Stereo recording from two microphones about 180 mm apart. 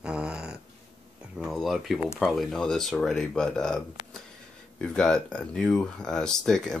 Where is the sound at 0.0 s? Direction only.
5° right (ahead or behind).